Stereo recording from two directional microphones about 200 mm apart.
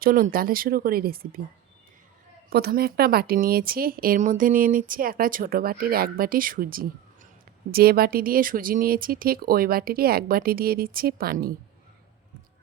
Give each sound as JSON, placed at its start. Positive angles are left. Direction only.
{"t": 0.0, "sound": "a woman's voice", "side_deg": -45}
{"t": 2.5, "sound": "a woman's voice", "side_deg": -50}